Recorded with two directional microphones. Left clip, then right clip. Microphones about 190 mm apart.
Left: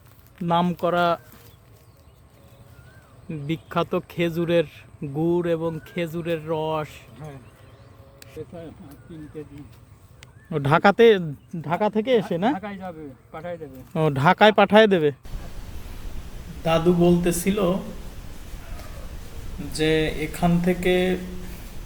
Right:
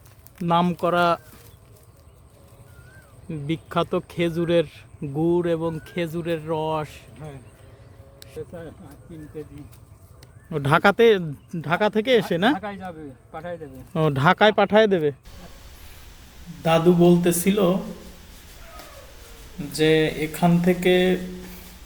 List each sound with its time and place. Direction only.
0.3 s speech: 10° right (ahead or behind)
3.2 s speech: 5° right (ahead or behind)
8.5 s speech: 20° right (ahead or behind)
10.5 s speech: 5° left (ahead or behind)
11.5 s speech: 10° right (ahead or behind)
12.5 s speech: centre (ahead or behind)
16.6 s speech: centre (ahead or behind)
19.7 s speech: centre (ahead or behind)